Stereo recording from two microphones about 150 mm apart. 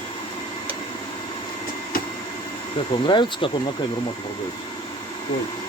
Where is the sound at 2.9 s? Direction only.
35° left (ahead or behind).